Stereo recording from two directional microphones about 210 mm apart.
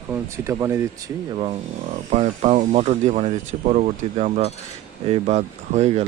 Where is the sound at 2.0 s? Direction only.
35° right (ahead or behind).